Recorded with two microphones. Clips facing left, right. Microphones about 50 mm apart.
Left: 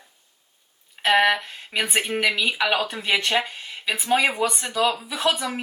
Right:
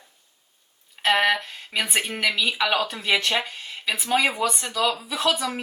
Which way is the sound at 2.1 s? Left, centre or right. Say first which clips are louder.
Left 2 dB; centre.